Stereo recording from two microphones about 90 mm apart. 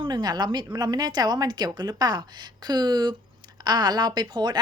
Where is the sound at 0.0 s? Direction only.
50° right (ahead or behind).